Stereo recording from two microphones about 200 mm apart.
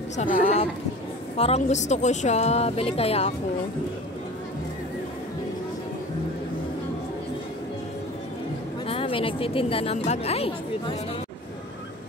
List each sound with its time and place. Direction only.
0.2 s a woman's voice: 35° left (ahead or behind)
8.8 s a woman's voice: 25° left (ahead or behind)